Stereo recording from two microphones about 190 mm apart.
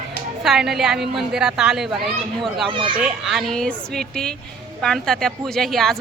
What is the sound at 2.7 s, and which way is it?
Speech, 25° right (ahead or behind).